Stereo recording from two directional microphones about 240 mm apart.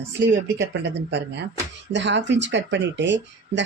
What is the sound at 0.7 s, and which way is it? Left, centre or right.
Speech, right.